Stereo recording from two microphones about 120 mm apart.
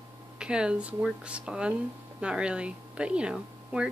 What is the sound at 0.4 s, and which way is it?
Speech, 5° right (ahead or behind).